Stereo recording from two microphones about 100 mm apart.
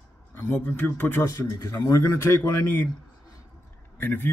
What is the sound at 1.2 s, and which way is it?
Speech, 30° left (ahead or behind).